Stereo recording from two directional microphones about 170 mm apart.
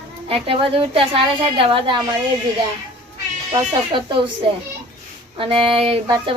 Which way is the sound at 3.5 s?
30° right (ahead or behind).